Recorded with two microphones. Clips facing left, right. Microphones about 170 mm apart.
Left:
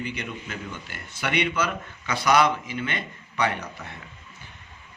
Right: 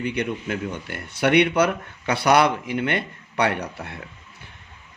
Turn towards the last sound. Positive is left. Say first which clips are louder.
# right 3 dB
turn(degrees=-65)  # may be behind; listen again after turning